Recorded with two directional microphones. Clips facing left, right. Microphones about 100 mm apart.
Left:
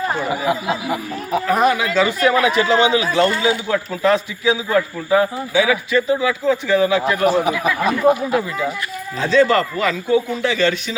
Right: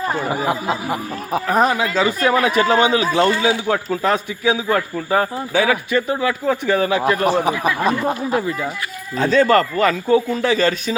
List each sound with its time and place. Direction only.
0.3 s speech: 40° right (ahead or behind)
7.3 s speech: 35° right (ahead or behind)
9.1 s speech: 45° right (ahead or behind)